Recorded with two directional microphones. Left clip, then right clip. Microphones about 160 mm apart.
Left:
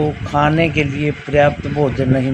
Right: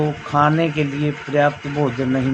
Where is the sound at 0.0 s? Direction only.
50° left (ahead or behind).